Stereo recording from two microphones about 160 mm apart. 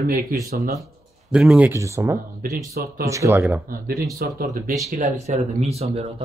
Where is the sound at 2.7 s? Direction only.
75° right (ahead or behind).